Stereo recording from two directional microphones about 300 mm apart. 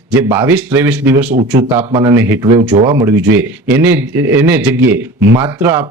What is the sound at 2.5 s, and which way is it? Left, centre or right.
A man's voice, right.